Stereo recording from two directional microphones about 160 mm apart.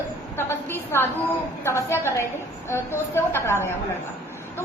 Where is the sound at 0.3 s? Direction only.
15° left (ahead or behind).